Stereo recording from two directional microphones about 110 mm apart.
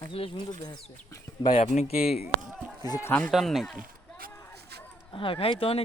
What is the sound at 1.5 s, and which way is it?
Speech, 65° left (ahead or behind).